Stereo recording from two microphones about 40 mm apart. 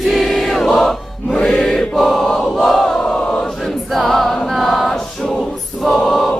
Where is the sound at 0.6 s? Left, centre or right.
Centre.